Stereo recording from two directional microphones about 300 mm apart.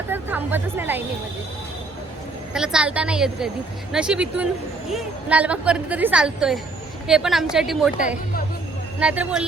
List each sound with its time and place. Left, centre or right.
0.1 s speech: centre
2.5 s a woman's voice: centre
7.9 s speech: left
9.0 s a woman's voice: centre